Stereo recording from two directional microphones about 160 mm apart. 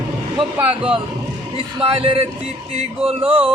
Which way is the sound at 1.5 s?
35° right (ahead or behind).